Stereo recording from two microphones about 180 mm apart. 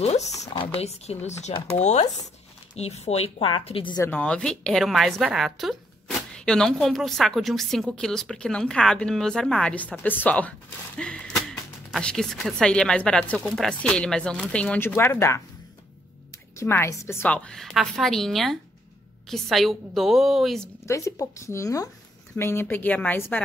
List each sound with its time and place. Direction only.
0.0 s speech: 35° left (ahead or behind)
4.0 s a woman's voice: 10° left (ahead or behind)
11.0 s a sound: 5° left (ahead or behind)
11.9 s a woman's voice: 5° left (ahead or behind)
16.5 s a woman's voice: 15° left (ahead or behind)
20.8 s speech: 15° left (ahead or behind)